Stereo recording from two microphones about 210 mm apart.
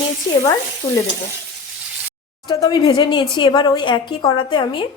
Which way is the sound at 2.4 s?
20° left (ahead or behind).